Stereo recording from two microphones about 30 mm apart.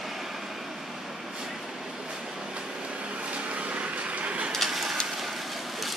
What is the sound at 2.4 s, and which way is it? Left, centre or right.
Vehicle, right.